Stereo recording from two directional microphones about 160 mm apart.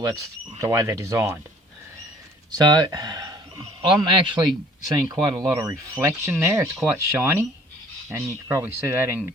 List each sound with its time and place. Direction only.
0.0 s speech: 20° right (ahead or behind)
2.6 s a man's voice: 25° right (ahead or behind)